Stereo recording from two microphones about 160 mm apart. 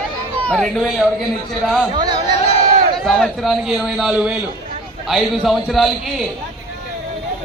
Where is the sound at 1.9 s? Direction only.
25° right (ahead or behind).